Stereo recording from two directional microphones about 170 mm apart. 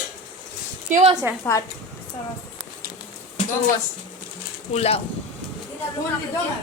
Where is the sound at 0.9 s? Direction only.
45° right (ahead or behind).